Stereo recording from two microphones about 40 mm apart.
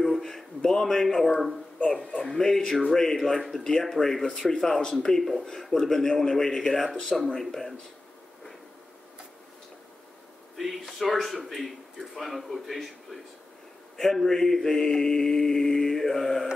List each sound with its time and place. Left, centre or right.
0.0 s a sound: centre
1.3 s a man's voice: centre
1.9 s mantra: centre
10.6 s a man's voice: centre
13.9 s mantra: centre